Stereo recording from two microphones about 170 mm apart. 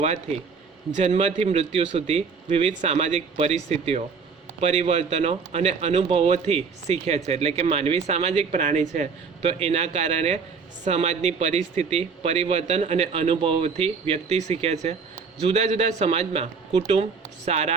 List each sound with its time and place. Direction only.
0.0 s a man's voice: 40° right (ahead or behind)